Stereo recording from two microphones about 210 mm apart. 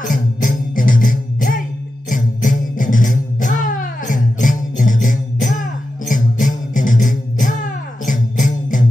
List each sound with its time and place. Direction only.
0.0 s music: 40° left (ahead or behind)